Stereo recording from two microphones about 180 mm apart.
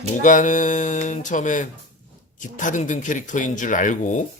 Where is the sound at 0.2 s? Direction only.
45° left (ahead or behind).